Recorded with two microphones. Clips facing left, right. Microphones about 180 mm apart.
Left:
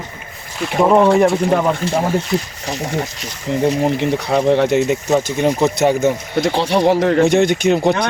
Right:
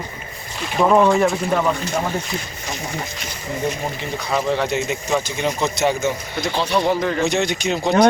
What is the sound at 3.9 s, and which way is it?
Speech, 65° left (ahead or behind).